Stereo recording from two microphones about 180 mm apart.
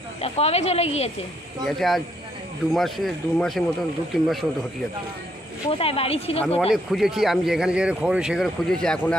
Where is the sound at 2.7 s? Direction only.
Centre (ahead or behind).